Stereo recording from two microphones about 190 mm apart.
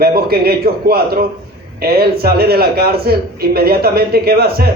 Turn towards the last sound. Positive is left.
turn(degrees=-55)  # may be behind; listen again after turning